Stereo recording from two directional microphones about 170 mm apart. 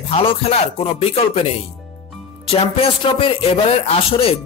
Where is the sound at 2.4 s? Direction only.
35° left (ahead or behind).